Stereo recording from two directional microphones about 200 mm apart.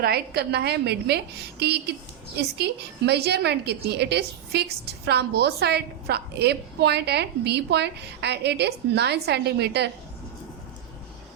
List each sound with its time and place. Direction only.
0.0 s a woman's voice: 50° right (ahead or behind)